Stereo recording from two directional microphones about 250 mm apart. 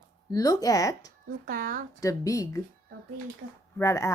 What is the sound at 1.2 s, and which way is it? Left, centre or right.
Speech, right.